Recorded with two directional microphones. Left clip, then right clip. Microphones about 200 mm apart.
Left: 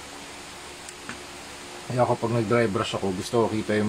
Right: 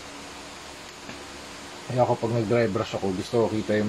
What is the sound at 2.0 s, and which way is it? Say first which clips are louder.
Speech: even; 15° left (ahead or behind).